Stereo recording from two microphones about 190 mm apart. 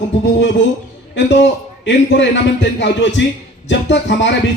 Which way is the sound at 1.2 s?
65° left (ahead or behind).